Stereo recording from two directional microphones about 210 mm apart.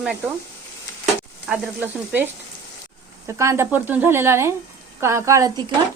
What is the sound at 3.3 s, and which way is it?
Speech, 15° right (ahead or behind).